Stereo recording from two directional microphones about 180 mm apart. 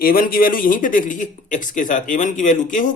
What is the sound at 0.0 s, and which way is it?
A man's voice, 50° left (ahead or behind).